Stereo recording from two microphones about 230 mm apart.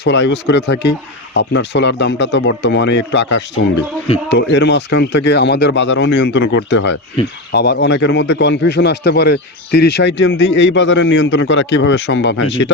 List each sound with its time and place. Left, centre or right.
0.0 s speech: left